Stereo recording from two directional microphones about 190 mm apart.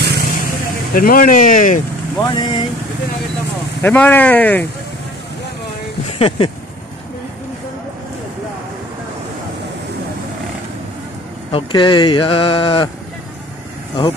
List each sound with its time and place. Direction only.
0.0 s vehicle: 55° right (ahead or behind)
0.9 s speech: 45° left (ahead or behind)
2.1 s speech: 25° left (ahead or behind)
3.8 s speech: 10° left (ahead or behind)
6.0 s speech: 30° left (ahead or behind)
11.5 s speech: 25° left (ahead or behind)